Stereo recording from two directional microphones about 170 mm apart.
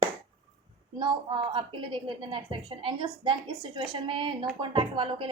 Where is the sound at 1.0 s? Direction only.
30° right (ahead or behind).